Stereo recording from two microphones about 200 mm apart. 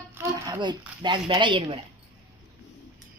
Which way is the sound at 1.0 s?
25° right (ahead or behind).